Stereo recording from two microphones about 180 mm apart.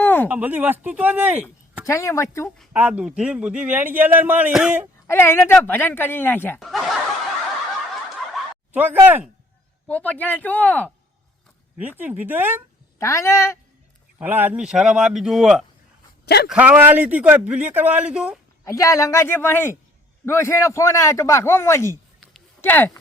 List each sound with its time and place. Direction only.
0.0 s a sound: 10° left (ahead or behind)
0.3 s a man's voice: 10° right (ahead or behind)
1.9 s a man's voice: 15° left (ahead or behind)
2.7 s a man's voice: 10° right (ahead or behind)
5.0 s a man's voice: 15° left (ahead or behind)
6.6 s a man's voice: centre (ahead or behind)
8.3 s a sound: 10° right (ahead or behind)
9.8 s a man's voice: 10° left (ahead or behind)
11.8 s a man's voice: 10° right (ahead or behind)
13.0 s a man's voice: 15° left (ahead or behind)
14.2 s a man's voice: 10° right (ahead or behind)
16.2 s a man's voice: 65° left (ahead or behind)
16.5 s a man's voice: 10° right (ahead or behind)
18.6 s a man's voice: 20° left (ahead or behind)